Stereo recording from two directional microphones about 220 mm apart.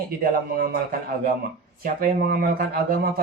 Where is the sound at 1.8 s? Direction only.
40° right (ahead or behind).